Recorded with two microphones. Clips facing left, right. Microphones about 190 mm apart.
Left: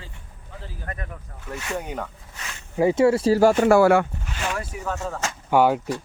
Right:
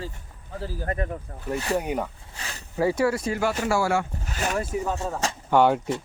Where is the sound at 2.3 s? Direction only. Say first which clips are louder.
Right 1 dB; 35° right (ahead or behind).